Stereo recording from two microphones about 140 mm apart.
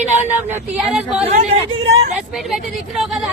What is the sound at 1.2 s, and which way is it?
Speech, 50° right (ahead or behind).